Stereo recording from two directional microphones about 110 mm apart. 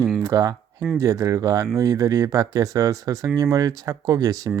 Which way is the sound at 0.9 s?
30° right (ahead or behind).